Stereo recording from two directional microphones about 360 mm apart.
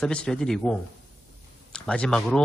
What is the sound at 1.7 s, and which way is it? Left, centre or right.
Speech, centre.